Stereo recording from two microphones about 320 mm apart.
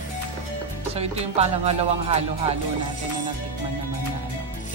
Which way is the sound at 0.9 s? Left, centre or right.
Centre.